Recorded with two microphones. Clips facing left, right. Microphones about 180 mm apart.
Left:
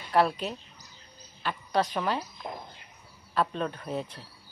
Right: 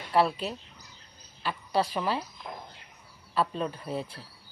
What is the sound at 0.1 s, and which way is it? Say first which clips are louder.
A woman's voice: even; 5° right (ahead or behind).